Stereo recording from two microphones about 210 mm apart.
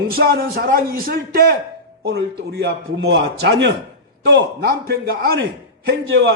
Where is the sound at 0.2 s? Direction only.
45° right (ahead or behind).